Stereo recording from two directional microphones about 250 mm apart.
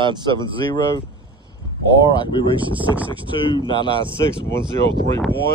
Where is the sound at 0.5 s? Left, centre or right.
Centre.